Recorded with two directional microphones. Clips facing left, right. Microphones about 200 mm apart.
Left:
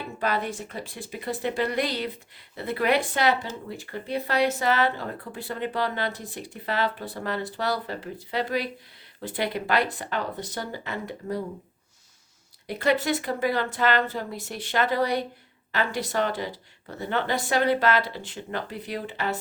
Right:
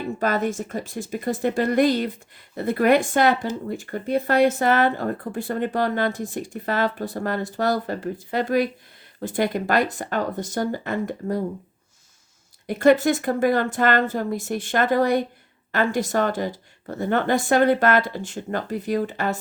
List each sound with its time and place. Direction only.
0.2 s speech: 45° right (ahead or behind)
12.6 s speech: 50° right (ahead or behind)